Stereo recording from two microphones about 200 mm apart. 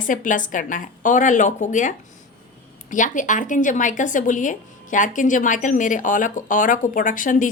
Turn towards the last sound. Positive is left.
turn(degrees=40)  # may be behind; listen again after turning